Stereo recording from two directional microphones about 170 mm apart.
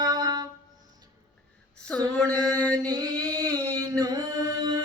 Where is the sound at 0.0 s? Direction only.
25° right (ahead or behind).